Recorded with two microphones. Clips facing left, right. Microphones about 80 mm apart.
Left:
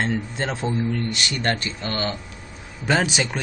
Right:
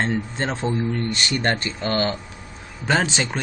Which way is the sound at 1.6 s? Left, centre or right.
Right.